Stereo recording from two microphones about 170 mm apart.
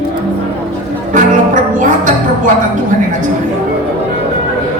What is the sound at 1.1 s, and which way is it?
Music, 50° right (ahead or behind).